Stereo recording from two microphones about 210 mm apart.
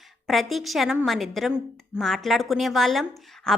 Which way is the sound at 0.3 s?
Centre (ahead or behind).